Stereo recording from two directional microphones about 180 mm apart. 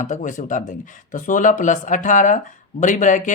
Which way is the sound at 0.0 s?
45° left (ahead or behind).